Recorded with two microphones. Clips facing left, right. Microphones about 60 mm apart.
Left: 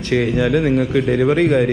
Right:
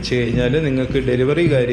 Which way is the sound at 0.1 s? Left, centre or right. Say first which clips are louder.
Left 2 dB; left.